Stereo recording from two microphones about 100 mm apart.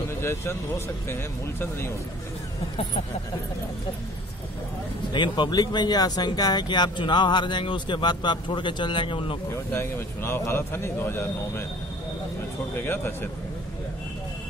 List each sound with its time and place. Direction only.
0.2 s a man's voice: 25° left (ahead or behind)
5.1 s speech: 50° left (ahead or behind)
9.7 s a man's voice: 25° left (ahead or behind)
12.7 s a man's voice: 20° left (ahead or behind)